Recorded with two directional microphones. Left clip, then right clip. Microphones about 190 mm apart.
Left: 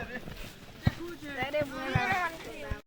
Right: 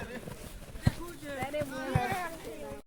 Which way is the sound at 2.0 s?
20° right (ahead or behind).